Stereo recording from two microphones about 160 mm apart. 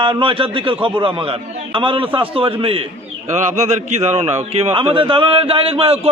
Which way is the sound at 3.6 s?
45° right (ahead or behind).